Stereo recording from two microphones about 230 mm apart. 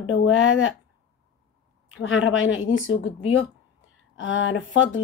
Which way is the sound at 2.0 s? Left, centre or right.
Left.